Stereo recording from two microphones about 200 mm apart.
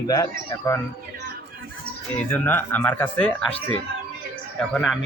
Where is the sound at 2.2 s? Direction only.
10° left (ahead or behind).